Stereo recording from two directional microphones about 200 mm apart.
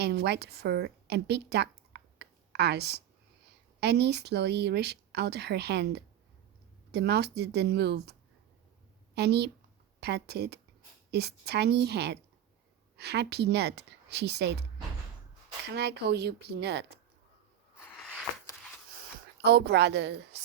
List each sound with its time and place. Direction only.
0.0 s a woman's voice: 55° right (ahead or behind)
9.1 s speech: 55° right (ahead or behind)
15.7 s speech: 55° right (ahead or behind)
17.7 s a sound: 5° left (ahead or behind)
19.4 s speech: 55° right (ahead or behind)